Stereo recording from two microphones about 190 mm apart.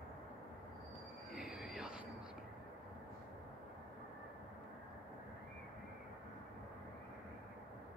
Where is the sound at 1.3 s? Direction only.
5° right (ahead or behind).